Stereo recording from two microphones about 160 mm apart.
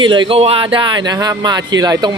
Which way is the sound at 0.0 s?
30° right (ahead or behind).